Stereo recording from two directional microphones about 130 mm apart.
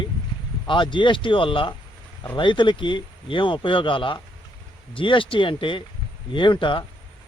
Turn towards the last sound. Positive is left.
turn(degrees=40)  # may be behind; listen again after turning